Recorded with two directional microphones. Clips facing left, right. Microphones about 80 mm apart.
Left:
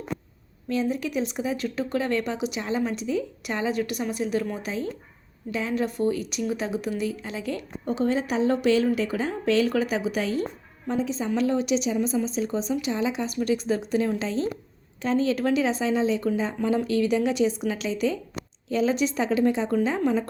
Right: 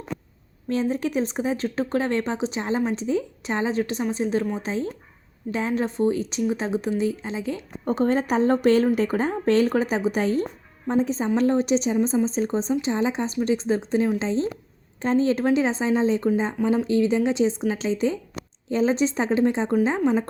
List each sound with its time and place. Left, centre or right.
0.7 s speech: right
7.9 s a woman's voice: right
16.6 s speech: centre